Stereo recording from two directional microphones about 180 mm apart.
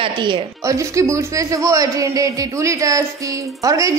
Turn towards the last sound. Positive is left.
turn(degrees=-20)  # may be behind; listen again after turning